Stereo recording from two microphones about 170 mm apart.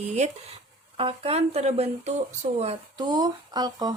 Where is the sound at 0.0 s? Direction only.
40° right (ahead or behind).